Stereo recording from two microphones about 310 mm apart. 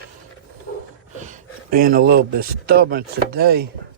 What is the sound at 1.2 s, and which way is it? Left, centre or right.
Speech, right.